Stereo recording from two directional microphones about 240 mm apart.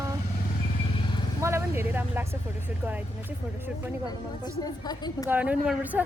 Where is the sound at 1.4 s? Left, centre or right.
Centre.